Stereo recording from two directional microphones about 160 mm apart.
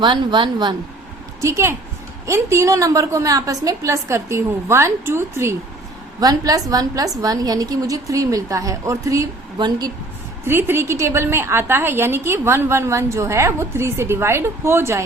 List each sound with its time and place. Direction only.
0.0 s a woman's voice: 30° right (ahead or behind)
1.4 s a woman's voice: 20° right (ahead or behind)
10.4 s a woman's voice: 15° right (ahead or behind)